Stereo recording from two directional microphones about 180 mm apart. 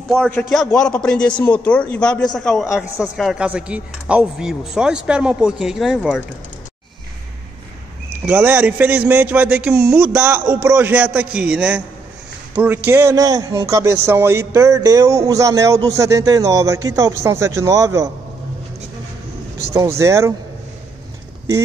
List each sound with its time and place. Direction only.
0.1 s speech: 5° left (ahead or behind)
8.3 s speech: 10° right (ahead or behind)
19.6 s speech: 15° right (ahead or behind)